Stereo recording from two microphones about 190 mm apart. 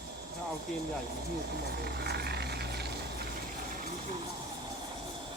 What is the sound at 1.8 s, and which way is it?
Vehicle, 55° right (ahead or behind).